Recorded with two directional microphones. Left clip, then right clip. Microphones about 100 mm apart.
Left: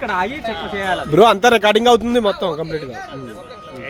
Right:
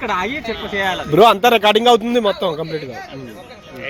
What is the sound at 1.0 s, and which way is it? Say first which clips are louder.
A man's voice: even; 25° left (ahead or behind).